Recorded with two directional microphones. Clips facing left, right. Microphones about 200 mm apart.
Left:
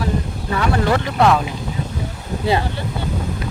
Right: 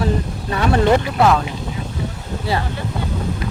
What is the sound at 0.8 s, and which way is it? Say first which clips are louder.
Speech: right 4 dB; 20° right (ahead or behind).